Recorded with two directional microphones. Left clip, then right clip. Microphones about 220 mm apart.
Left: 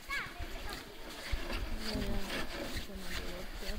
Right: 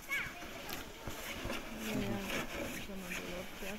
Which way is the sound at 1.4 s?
40° right (ahead or behind).